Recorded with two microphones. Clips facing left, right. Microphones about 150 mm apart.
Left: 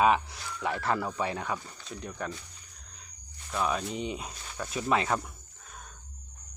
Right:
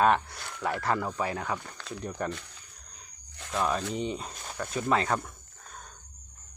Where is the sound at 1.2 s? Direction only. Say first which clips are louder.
Even; 25° left (ahead or behind).